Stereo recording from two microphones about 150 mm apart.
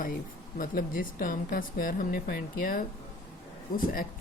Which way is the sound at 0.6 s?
65° left (ahead or behind).